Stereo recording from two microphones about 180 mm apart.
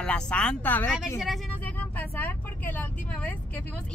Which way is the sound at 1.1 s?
Centre (ahead or behind).